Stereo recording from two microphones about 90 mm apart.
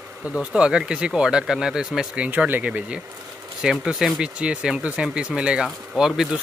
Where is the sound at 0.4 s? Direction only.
10° right (ahead or behind).